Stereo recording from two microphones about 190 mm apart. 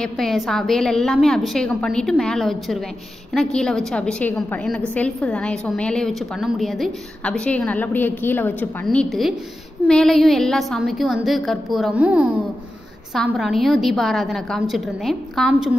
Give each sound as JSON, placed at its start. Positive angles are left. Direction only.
{"t": 0.0, "sound": "a woman's voice", "side_deg": 0}